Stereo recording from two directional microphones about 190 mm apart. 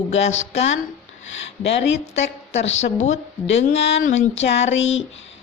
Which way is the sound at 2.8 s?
40° left (ahead or behind).